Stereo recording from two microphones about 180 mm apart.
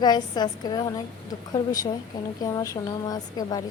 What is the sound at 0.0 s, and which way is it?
A woman's voice, 25° left (ahead or behind).